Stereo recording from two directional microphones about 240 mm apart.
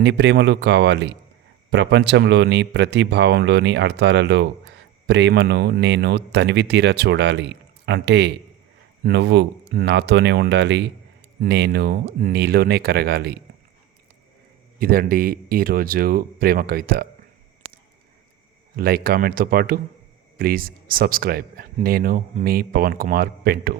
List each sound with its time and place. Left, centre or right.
0.0 s speech: right
14.8 s speech: right
18.8 s speech: right